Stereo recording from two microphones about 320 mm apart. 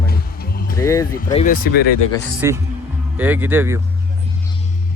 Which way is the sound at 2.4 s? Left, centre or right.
Centre.